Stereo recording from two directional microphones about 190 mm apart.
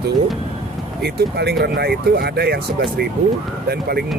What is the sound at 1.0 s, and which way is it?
Speech, 60° right (ahead or behind).